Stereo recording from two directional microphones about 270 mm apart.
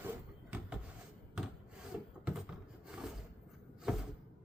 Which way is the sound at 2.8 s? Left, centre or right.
Centre.